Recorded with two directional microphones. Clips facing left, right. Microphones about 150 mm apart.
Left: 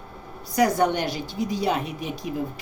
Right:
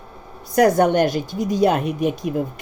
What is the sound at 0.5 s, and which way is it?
A woman's voice, 55° right (ahead or behind).